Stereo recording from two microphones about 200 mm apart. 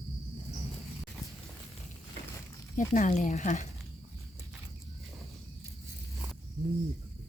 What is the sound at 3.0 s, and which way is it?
Speech, 40° left (ahead or behind).